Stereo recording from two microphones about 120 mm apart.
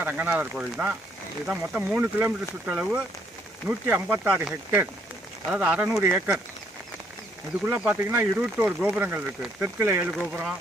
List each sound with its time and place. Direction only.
0.0 s speech: 15° right (ahead or behind)
5.9 s speech: 15° right (ahead or behind)
7.6 s speech: 10° right (ahead or behind)
10.1 s speech: 5° right (ahead or behind)